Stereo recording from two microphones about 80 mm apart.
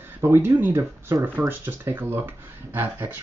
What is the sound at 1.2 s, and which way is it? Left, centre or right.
Speech, right.